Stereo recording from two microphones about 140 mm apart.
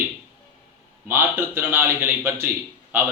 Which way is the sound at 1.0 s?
15° right (ahead or behind).